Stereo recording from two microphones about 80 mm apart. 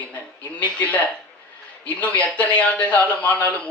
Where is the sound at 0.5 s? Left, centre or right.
Centre.